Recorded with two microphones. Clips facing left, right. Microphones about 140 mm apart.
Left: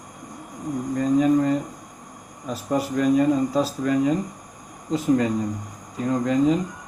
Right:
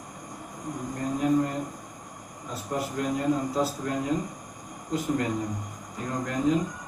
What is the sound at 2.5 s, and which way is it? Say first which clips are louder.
Speech: left 7 dB; 90° left.